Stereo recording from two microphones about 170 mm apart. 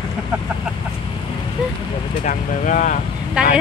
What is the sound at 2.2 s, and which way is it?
Speech, 45° left (ahead or behind).